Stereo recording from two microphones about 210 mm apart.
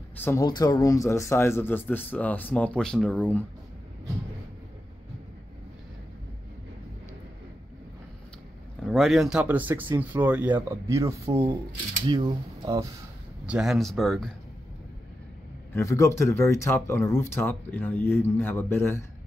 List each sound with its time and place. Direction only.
0.2 s speech: 15° left (ahead or behind)
8.8 s speech: centre (ahead or behind); by 12.8 s 20° right (ahead or behind)
13.5 s speech: centre (ahead or behind)
15.7 s speech: 15° left (ahead or behind)